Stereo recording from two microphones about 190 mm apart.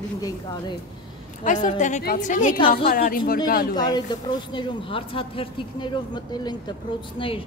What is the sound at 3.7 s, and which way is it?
Speech, 20° left (ahead or behind).